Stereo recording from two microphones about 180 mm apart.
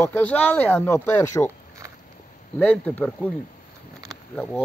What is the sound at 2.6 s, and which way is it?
Speech, 10° left (ahead or behind).